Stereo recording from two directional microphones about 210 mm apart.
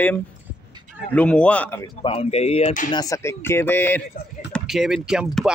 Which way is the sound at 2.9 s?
15° left (ahead or behind).